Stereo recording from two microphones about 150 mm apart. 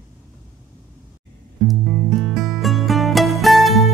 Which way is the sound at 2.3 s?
Centre (ahead or behind).